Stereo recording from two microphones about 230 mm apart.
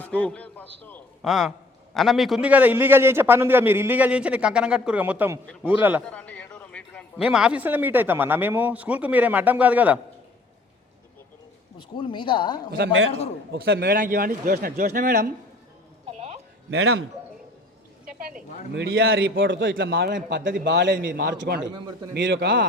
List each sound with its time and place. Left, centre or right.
0.0 s a man's voice: centre
6.1 s a sound: centre
7.3 s speech: centre
11.8 s speech: left
12.7 s a man's voice: right
16.0 s a sound: right
16.6 s a man's voice: right
18.7 s a man's voice: right